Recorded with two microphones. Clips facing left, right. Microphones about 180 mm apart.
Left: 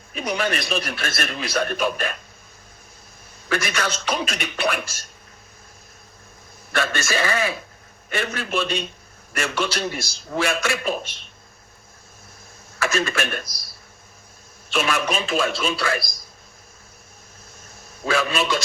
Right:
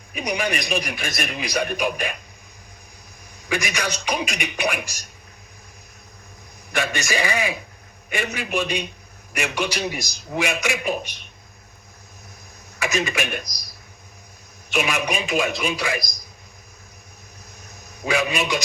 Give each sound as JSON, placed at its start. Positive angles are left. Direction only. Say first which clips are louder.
{"t": 0.1, "sound": "a man's voice", "louder": "even", "side_deg": -15}
{"t": 3.5, "sound": "a man's voice", "louder": "left 1 dB", "side_deg": -15}
{"t": 6.7, "sound": "a man's voice", "louder": "even", "side_deg": -15}
{"t": 12.8, "sound": "a man's voice", "louder": "left 1 dB", "side_deg": -15}
{"t": 14.7, "sound": "a man's voice", "louder": "even", "side_deg": -15}
{"t": 18.0, "sound": "a man's voice", "louder": "even", "side_deg": -15}